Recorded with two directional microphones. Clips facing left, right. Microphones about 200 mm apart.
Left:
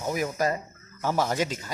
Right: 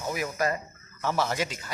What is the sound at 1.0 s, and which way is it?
Speech, 10° left (ahead or behind).